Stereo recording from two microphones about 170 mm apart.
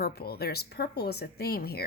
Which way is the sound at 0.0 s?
65° left (ahead or behind).